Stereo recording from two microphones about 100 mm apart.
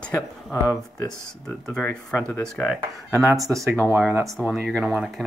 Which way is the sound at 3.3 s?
35° right (ahead or behind).